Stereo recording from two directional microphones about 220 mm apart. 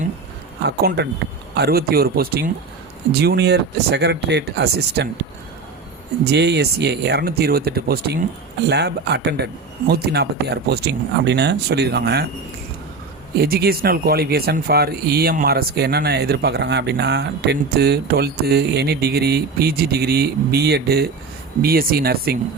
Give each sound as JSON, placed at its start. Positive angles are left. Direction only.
{"t": 0.6, "sound": "speech", "side_deg": -50}
{"t": 6.3, "sound": "speech", "side_deg": -50}
{"t": 13.4, "sound": "speech", "side_deg": -45}